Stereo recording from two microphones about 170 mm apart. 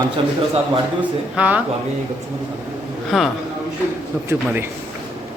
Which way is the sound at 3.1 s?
Centre (ahead or behind).